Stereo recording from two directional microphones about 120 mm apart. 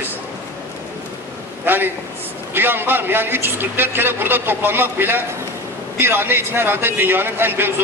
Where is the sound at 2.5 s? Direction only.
15° right (ahead or behind).